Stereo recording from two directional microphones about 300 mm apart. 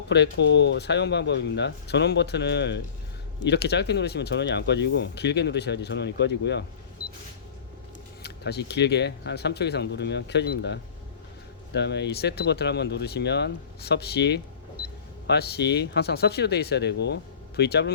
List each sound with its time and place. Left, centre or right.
0.1 s speech: left
8.2 s speech: left